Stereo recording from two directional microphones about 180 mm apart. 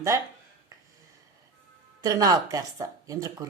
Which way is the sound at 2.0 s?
20° right (ahead or behind).